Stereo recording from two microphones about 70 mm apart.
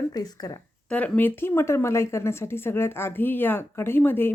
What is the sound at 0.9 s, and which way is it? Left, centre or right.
A woman's voice, left.